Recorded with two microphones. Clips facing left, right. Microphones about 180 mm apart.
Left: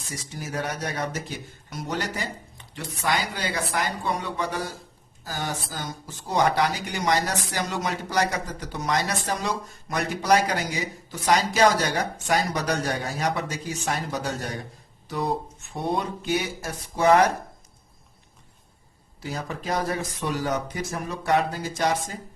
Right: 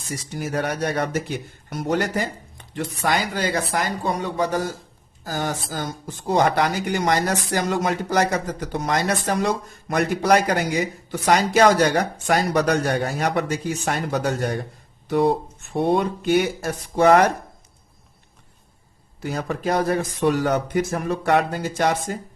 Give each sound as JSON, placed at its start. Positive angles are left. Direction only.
{"t": 0.3, "sound": "a woman's voice", "side_deg": -60}
{"t": 15.7, "sound": "a woman's voice", "side_deg": -60}
{"t": 19.2, "sound": "a woman's voice", "side_deg": -60}